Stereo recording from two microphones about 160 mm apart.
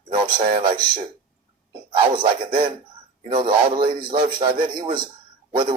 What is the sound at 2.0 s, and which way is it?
A man's voice, 30° right (ahead or behind).